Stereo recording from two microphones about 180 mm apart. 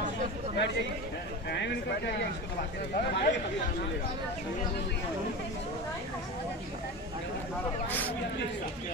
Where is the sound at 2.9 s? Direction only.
50° left (ahead or behind).